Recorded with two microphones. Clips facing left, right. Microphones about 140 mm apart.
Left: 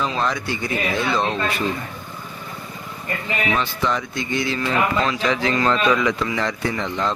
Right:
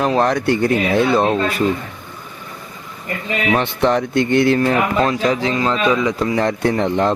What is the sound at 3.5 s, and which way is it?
Speech, 60° right (ahead or behind).